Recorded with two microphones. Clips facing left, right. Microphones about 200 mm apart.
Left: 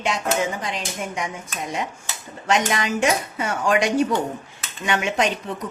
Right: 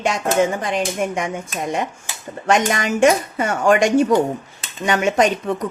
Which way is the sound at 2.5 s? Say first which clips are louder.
Right 3 dB; 50° right (ahead or behind).